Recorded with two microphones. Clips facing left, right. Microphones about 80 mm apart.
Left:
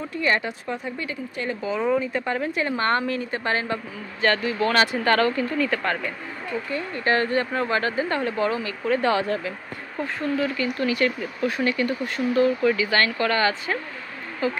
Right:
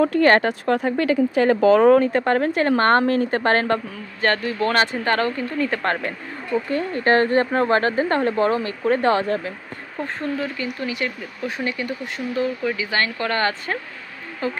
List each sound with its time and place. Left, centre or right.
0.0 s speech: right
2.0 s a woman's voice: right
5.0 s speech: right
5.8 s a woman's voice: right
10.8 s speech: centre
13.3 s speech: right